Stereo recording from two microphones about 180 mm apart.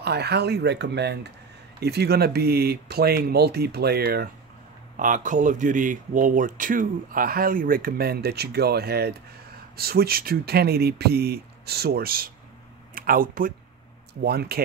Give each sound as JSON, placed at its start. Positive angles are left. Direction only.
{"t": 0.0, "sound": "speech", "side_deg": -65}
{"t": 4.9, "sound": "speech", "side_deg": -45}